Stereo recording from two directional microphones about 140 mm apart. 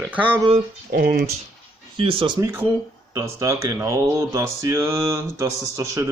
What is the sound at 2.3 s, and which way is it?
A man's voice, 20° right (ahead or behind).